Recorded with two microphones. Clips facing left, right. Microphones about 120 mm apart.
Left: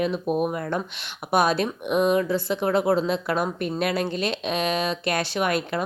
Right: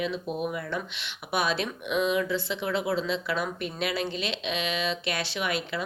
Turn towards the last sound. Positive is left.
turn(degrees=50)  # may be behind; listen again after turning